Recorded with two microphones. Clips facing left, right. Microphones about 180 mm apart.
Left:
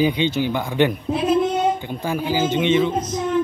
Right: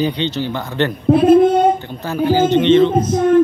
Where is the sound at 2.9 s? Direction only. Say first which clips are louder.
Right 9 dB; 50° right (ahead or behind).